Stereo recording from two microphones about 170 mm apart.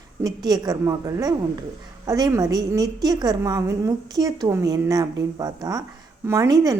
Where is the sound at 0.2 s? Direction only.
25° right (ahead or behind).